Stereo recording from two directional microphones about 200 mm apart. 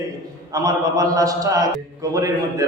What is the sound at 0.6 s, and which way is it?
A man's voice, 15° right (ahead or behind).